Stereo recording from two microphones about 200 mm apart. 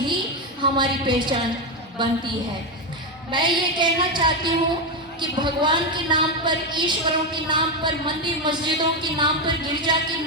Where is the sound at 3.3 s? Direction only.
20° right (ahead or behind).